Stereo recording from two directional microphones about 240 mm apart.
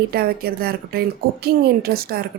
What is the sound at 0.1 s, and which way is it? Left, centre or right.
Speech, right.